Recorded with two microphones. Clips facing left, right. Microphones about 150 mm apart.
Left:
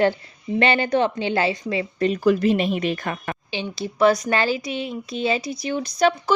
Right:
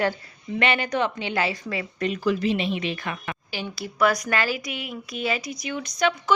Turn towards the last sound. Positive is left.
turn(degrees=35)  # may be behind; listen again after turning